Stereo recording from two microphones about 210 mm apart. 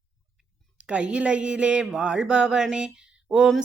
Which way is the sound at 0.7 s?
5° right (ahead or behind).